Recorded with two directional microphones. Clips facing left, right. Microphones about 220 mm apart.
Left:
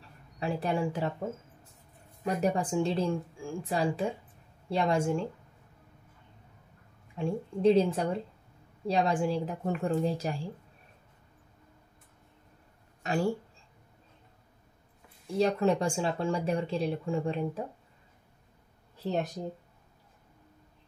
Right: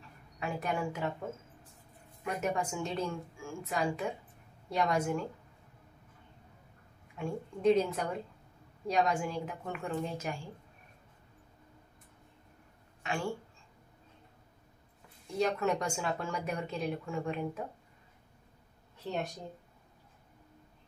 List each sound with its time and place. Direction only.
0.4 s speech: 30° left (ahead or behind)
2.2 s a woman's voice: 35° left (ahead or behind)
7.2 s speech: 30° left (ahead or behind)
13.0 s speech: 40° left (ahead or behind)
15.3 s speech: 30° left (ahead or behind)